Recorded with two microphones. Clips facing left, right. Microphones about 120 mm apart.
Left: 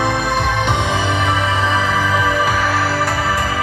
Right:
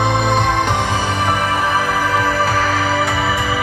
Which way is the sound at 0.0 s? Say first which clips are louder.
Right 2 dB; 20° right (ahead or behind).